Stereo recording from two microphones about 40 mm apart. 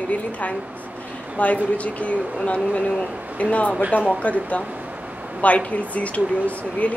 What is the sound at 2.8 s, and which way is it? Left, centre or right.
Speech, centre.